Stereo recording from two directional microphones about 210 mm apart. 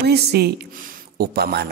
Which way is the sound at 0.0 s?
50° right (ahead or behind).